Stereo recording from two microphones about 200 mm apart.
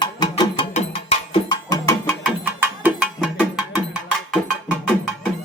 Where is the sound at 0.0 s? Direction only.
20° left (ahead or behind).